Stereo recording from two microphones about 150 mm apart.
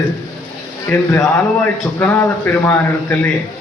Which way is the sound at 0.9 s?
10° left (ahead or behind).